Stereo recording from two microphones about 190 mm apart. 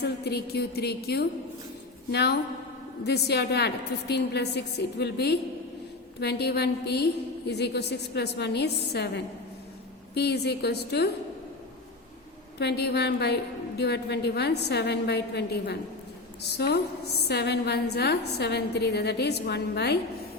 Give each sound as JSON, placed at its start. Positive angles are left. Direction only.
{"t": 0.0, "sound": "a woman's voice", "side_deg": 60}
{"t": 12.5, "sound": "a woman's voice", "side_deg": 60}